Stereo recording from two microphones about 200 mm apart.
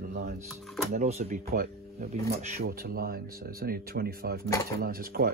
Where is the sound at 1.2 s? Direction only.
50° right (ahead or behind).